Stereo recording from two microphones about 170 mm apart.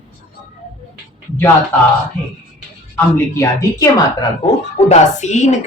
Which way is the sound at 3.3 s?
20° left (ahead or behind).